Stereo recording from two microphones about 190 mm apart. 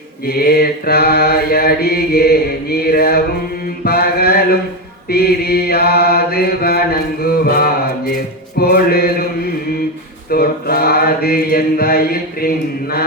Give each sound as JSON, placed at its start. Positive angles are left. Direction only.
{"t": 0.3, "sound": "mantra", "side_deg": 55}
{"t": 8.5, "sound": "music", "side_deg": 55}
{"t": 10.2, "sound": "mantra", "side_deg": 55}